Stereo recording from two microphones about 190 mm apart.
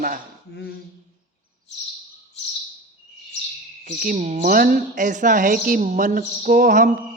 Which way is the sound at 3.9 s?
45° right (ahead or behind).